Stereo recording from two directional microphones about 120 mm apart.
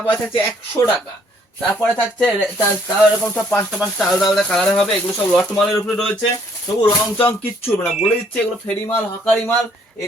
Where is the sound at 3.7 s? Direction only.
Centre (ahead or behind).